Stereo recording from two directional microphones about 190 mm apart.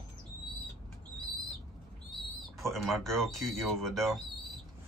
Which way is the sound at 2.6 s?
Centre (ahead or behind).